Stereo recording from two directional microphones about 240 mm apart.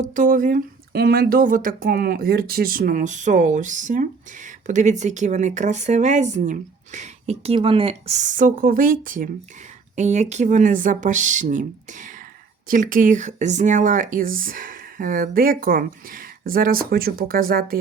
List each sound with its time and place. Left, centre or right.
0.0 s speech: right